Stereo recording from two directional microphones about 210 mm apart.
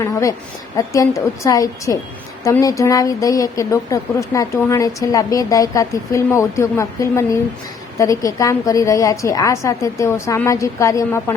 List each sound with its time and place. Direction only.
0.0 s a woman's voice: 15° left (ahead or behind)